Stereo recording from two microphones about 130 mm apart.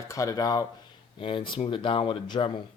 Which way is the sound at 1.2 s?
40° left (ahead or behind).